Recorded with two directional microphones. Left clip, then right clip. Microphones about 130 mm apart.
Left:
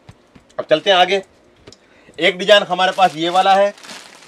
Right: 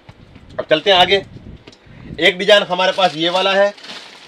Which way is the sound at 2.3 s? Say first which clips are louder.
Left 2 dB; 20° right (ahead or behind).